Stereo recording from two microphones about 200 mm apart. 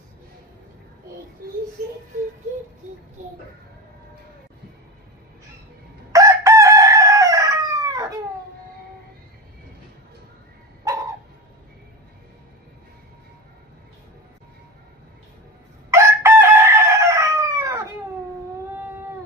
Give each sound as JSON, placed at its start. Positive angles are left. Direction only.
{"t": 1.4, "sound": "a sound", "side_deg": -45}
{"t": 6.1, "sound": "chicken", "side_deg": -15}
{"t": 15.9, "sound": "chicken", "side_deg": -15}